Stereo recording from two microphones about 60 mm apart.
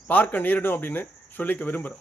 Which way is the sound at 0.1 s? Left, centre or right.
Left.